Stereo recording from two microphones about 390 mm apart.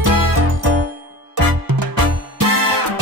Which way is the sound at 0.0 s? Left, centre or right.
Right.